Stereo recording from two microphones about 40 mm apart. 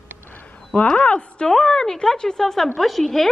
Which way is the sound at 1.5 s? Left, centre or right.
Centre.